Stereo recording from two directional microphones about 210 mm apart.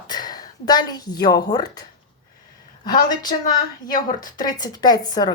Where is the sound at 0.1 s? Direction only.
20° left (ahead or behind).